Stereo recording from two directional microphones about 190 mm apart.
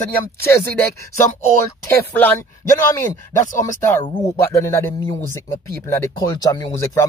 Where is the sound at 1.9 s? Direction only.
10° left (ahead or behind).